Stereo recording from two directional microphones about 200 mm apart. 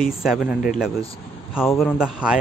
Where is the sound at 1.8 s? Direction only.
5° right (ahead or behind).